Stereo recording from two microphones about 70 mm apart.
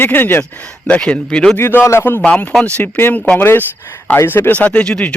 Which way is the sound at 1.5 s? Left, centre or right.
Left.